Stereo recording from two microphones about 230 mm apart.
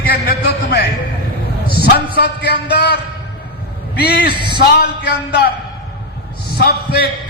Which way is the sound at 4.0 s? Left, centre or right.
Left.